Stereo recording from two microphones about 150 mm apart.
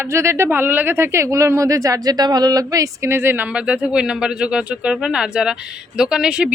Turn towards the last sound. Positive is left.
turn(degrees=-5)  # may be behind; listen again after turning